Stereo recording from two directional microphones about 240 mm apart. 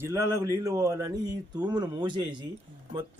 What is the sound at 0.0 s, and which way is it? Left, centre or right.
Speech, centre.